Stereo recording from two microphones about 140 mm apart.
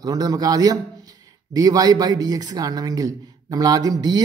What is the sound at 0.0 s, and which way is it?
A man's voice, 25° right (ahead or behind).